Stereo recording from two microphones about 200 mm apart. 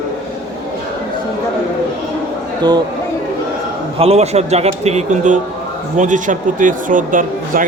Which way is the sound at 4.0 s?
30° right (ahead or behind).